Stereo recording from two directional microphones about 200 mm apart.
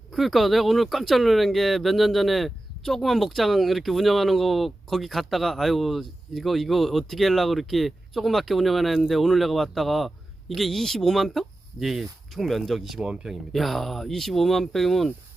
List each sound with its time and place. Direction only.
0.1 s speech: centre (ahead or behind)